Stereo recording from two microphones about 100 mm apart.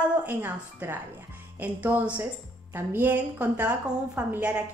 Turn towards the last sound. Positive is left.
turn(degrees=-15)  # may be behind; listen again after turning